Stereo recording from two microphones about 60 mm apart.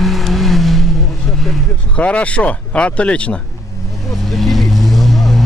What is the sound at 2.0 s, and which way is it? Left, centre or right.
Speech, left.